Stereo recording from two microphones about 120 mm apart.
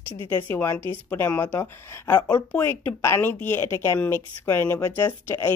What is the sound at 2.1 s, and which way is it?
Speech, 35° left (ahead or behind).